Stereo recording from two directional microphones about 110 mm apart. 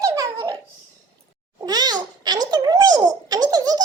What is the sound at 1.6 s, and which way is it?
Babbling, 40° right (ahead or behind).